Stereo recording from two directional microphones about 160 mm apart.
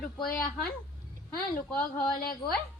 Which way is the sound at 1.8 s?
65° left (ahead or behind).